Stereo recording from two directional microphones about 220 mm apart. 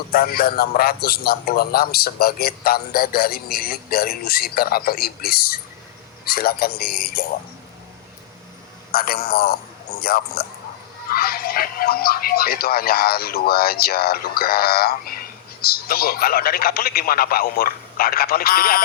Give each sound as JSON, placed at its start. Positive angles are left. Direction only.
{"t": 0.1, "sound": "speech", "side_deg": 45}
{"t": 8.9, "sound": "speech", "side_deg": 45}